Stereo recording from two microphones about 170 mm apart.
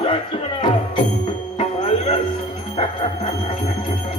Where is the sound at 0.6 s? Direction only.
30° left (ahead or behind).